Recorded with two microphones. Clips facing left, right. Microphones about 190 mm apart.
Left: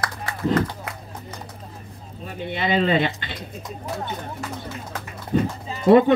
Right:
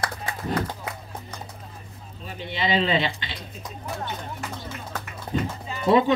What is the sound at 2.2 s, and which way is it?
Speech, 50° left (ahead or behind).